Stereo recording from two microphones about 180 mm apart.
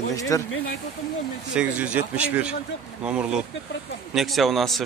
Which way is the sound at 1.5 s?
5° right (ahead or behind).